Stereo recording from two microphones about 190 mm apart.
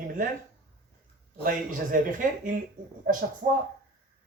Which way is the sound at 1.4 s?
45° right (ahead or behind).